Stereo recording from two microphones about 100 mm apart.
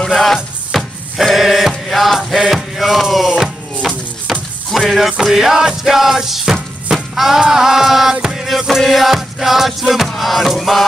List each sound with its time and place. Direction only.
0.0 s music: centre (ahead or behind)